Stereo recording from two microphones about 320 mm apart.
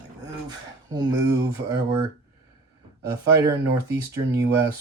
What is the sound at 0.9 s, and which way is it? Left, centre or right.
Speech, centre.